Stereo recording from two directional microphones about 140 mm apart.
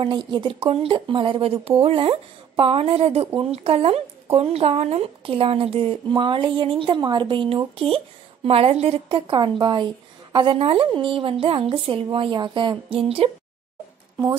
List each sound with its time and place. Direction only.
0.0 s a woman's voice: 35° right (ahead or behind)
9.3 s speech: 35° right (ahead or behind)